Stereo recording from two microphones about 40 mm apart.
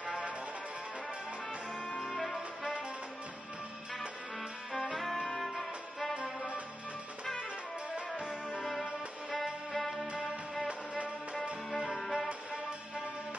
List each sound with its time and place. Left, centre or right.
2.0 s saxophone: centre
4.7 s music: centre
9.3 s music: centre
12.0 s music: centre
12.3 s music: right